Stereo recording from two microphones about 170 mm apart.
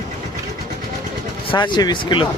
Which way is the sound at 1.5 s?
25° left (ahead or behind).